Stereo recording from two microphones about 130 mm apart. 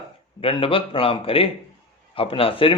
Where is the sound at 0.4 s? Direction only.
45° left (ahead or behind).